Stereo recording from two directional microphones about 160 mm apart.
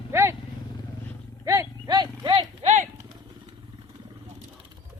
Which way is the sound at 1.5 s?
20° right (ahead or behind).